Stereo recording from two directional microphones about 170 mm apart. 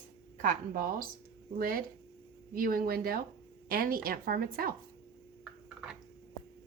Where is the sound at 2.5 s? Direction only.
60° right (ahead or behind).